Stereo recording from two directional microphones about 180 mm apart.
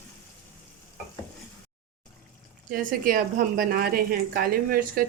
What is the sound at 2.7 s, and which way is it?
A woman's voice, 50° right (ahead or behind).